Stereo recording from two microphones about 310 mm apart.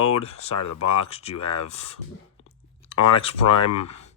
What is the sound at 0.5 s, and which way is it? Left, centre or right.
Speech, left.